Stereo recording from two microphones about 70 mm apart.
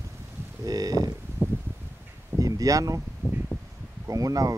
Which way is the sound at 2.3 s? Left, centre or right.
Right.